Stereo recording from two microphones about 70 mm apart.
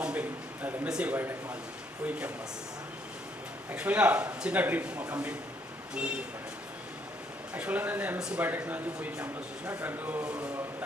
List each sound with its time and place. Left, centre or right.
0.0 s a man's voice: right
1.1 s speech: right
2.0 s speech: centre
3.7 s speech: right
7.5 s speech: right
9.2 s speech: right
10.2 s a sound: right